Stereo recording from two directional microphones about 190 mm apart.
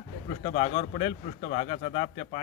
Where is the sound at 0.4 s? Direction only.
35° left (ahead or behind).